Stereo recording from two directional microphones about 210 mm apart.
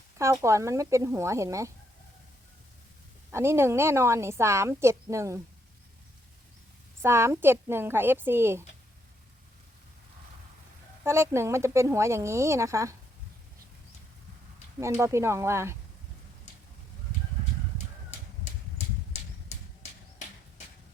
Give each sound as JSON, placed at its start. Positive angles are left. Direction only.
{"t": 0.2, "sound": "a woman's voice", "side_deg": -15}
{"t": 3.3, "sound": "a woman's voice", "side_deg": -10}
{"t": 7.0, "sound": "a woman's voice", "side_deg": -10}
{"t": 11.0, "sound": "a woman's voice", "side_deg": -15}
{"t": 14.8, "sound": "a woman's voice", "side_deg": -15}
{"t": 19.1, "sound": "a sound", "side_deg": 35}